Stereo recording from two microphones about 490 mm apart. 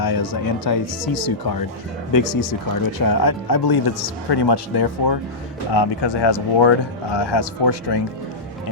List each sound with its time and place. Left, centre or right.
0.0 s speech: left